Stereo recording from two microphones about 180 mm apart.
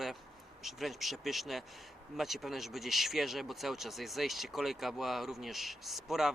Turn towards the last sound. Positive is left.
turn(degrees=0)  # may be behind; listen again after turning